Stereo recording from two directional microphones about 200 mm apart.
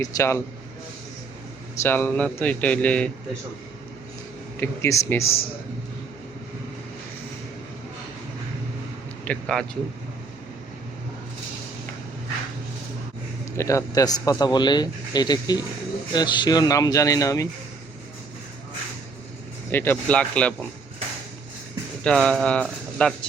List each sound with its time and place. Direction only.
0.0 s a man's voice: 15° left (ahead or behind)
1.7 s a man's voice: 10° left (ahead or behind)
4.6 s a man's voice: 10° left (ahead or behind)
5.2 s a man's voice: 30° left (ahead or behind)
9.2 s speech: 5° left (ahead or behind)
13.6 s a man's voice: 15° left (ahead or behind)
19.7 s a man's voice: 10° left (ahead or behind)
22.0 s speech: 5° left (ahead or behind)